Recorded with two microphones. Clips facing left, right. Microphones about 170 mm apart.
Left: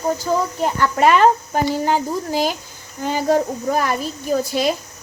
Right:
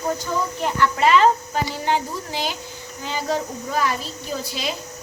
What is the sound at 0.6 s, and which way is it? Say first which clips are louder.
Speech: left 2 dB; 45° left (ahead or behind).